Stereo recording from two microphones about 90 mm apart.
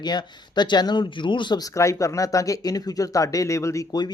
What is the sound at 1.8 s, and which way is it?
Speech, 35° left (ahead or behind).